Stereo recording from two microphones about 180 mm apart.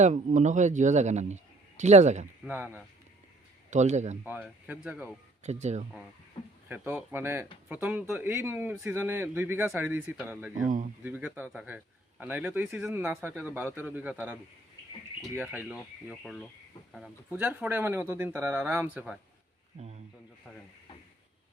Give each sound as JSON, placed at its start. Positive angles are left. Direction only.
{"t": 0.0, "sound": "a man's voice", "side_deg": -45}
{"t": 2.4, "sound": "speech", "side_deg": -10}
{"t": 3.7, "sound": "a man's voice", "side_deg": -40}
{"t": 4.2, "sound": "speech", "side_deg": -5}
{"t": 5.4, "sound": "speech", "side_deg": -40}
{"t": 6.7, "sound": "speech", "side_deg": -10}
{"t": 15.4, "sound": "speech", "side_deg": -10}